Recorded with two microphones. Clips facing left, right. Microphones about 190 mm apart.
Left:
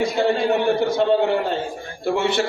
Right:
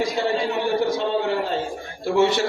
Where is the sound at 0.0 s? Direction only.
55° left (ahead or behind).